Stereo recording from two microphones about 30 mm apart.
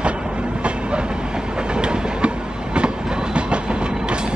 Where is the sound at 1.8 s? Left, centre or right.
Right.